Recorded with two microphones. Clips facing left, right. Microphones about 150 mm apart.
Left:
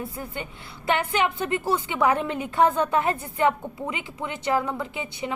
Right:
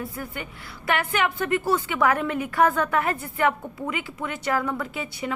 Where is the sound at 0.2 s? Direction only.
25° left (ahead or behind).